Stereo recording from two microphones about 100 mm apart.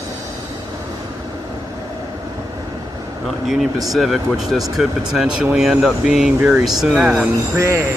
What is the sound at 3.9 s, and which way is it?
Speech, centre (ahead or behind).